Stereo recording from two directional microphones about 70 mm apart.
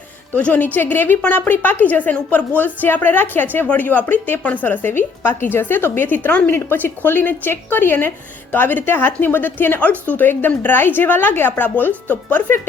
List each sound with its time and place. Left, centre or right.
0.3 s a woman's voice: left